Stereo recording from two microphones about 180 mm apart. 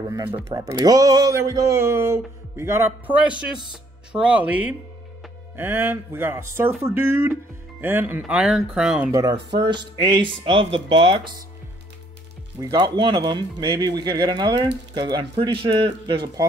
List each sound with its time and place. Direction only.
0.3 s speech: 20° right (ahead or behind)
9.1 s speech: 20° right (ahead or behind)
12.5 s speech: 20° right (ahead or behind)